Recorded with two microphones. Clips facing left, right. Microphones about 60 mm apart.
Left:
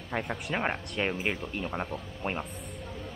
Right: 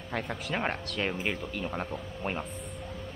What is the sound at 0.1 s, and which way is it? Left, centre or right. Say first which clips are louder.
Speech: left 1 dB; centre.